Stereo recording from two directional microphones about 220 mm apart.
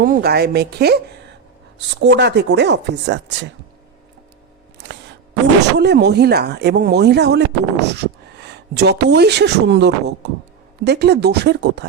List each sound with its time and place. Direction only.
0.0 s speech: 45° right (ahead or behind)
2.0 s speech: 50° right (ahead or behind)
4.8 s a sound: 50° right (ahead or behind)
5.7 s speech: 50° right (ahead or behind)